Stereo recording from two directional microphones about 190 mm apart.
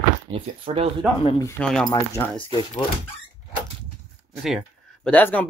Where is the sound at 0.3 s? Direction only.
25° right (ahead or behind).